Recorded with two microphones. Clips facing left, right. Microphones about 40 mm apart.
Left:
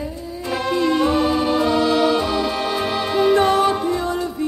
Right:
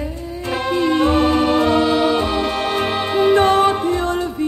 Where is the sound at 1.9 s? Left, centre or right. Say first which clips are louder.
Right 1 dB; right.